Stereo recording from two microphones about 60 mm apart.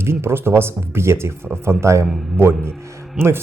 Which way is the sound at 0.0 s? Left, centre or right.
Right.